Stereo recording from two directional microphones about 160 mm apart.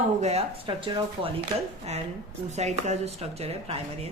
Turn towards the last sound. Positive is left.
turn(degrees=-40)  # may be behind; listen again after turning